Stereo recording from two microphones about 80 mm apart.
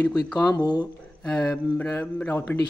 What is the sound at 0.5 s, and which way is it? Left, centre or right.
Speech, left.